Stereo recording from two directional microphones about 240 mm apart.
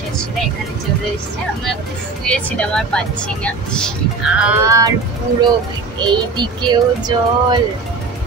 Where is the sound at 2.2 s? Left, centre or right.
Centre.